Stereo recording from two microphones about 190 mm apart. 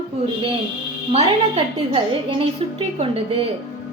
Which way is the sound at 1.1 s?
30° right (ahead or behind).